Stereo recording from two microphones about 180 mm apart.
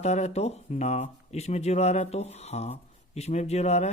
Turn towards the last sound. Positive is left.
turn(degrees=35)  # may be behind; listen again after turning